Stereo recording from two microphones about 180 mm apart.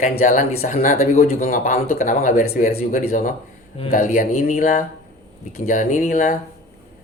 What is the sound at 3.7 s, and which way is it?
Speech, 35° left (ahead or behind).